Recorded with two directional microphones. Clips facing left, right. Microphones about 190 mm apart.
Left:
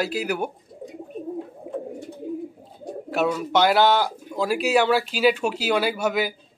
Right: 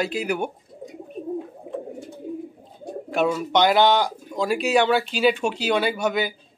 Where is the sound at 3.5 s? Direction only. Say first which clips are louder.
Even; 5° left (ahead or behind).